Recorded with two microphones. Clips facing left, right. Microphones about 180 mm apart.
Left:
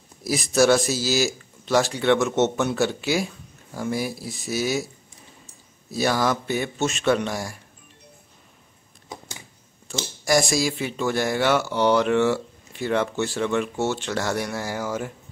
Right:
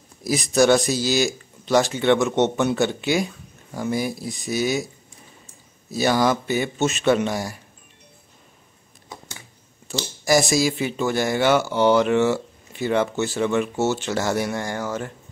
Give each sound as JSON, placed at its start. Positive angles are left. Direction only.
{"t": 0.2, "sound": "speech", "side_deg": 0}
{"t": 5.9, "sound": "speech", "side_deg": 0}
{"t": 9.8, "sound": "speech", "side_deg": 0}